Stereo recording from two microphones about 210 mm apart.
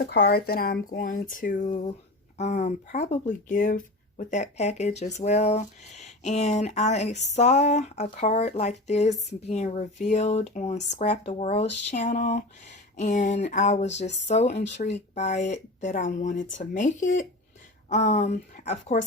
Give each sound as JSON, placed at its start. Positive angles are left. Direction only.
{"t": 0.0, "sound": "speech", "side_deg": 45}